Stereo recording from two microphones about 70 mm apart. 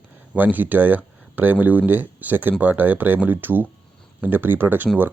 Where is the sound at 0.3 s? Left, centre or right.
Right.